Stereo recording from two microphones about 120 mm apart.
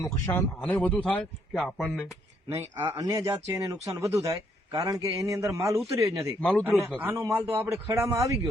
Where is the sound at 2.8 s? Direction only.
35° right (ahead or behind).